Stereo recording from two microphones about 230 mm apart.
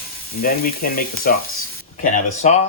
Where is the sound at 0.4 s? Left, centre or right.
Left.